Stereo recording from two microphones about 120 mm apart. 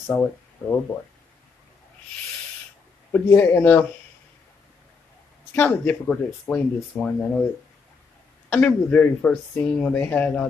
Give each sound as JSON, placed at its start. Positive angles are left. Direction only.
{"t": 0.1, "sound": "speech", "side_deg": 15}
{"t": 3.1, "sound": "speech", "side_deg": 20}
{"t": 5.5, "sound": "speech", "side_deg": 15}
{"t": 8.5, "sound": "speech", "side_deg": 15}